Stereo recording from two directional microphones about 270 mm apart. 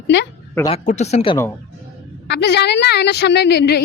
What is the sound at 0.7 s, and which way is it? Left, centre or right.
Speech, left.